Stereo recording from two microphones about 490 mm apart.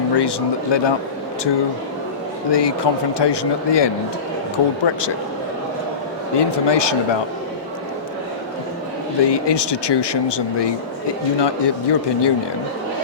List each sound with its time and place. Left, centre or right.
0.1 s speech: left
2.5 s speech: left
6.3 s speech: left
9.2 s speech: left